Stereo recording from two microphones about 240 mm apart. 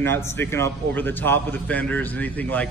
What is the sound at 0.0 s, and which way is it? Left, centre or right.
A man's voice, centre.